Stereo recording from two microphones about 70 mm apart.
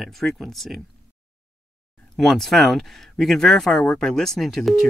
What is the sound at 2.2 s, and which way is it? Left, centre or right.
A man's voice, centre.